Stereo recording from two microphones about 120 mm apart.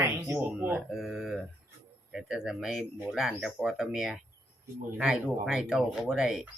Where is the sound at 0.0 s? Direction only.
20° right (ahead or behind).